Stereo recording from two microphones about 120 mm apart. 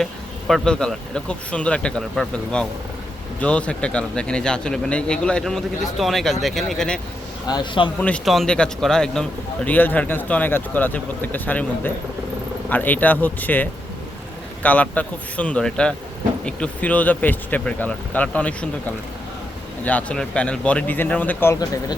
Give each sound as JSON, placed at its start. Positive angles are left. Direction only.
{"t": 0.0, "sound": "speech", "side_deg": 0}
{"t": 7.4, "sound": "speech", "side_deg": 40}
{"t": 7.9, "sound": "speech", "side_deg": 10}
{"t": 8.2, "sound": "speech", "side_deg": 0}
{"t": 19.8, "sound": "speech", "side_deg": 15}